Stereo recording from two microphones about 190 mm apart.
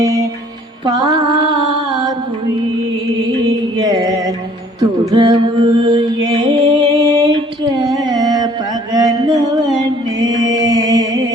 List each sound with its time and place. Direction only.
0.0 s music: 15° right (ahead or behind)
1.0 s mantra: 25° right (ahead or behind)
3.3 s music: 20° right (ahead or behind)
8.0 s carnatic music: 20° right (ahead or behind)
8.9 s mantra: 20° right (ahead or behind)
9.8 s music: 20° right (ahead or behind)